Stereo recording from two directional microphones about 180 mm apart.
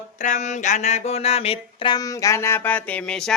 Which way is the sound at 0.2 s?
40° left (ahead or behind).